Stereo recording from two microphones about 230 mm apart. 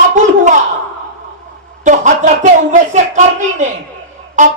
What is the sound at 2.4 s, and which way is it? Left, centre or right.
Speech, right.